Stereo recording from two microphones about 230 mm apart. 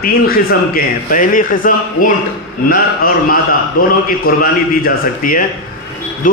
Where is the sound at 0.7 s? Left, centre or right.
Left.